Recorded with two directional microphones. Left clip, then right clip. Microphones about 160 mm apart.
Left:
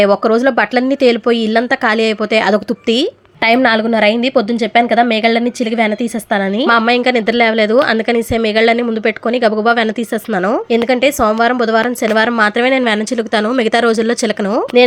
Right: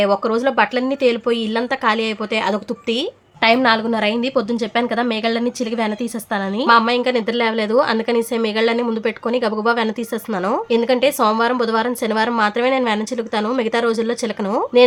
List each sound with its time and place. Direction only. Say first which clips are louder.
0.0 s speech: left 6 dB; 25° left (ahead or behind)